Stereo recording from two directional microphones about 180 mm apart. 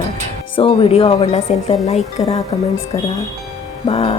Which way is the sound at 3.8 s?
30° left (ahead or behind).